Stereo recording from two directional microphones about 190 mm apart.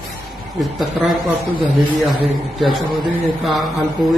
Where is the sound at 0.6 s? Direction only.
Centre (ahead or behind).